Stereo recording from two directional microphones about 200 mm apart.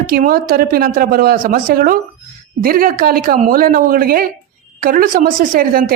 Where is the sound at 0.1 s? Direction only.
45° right (ahead or behind).